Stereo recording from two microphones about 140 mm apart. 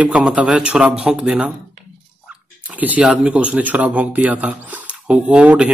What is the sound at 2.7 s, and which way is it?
Speech, 10° right (ahead or behind).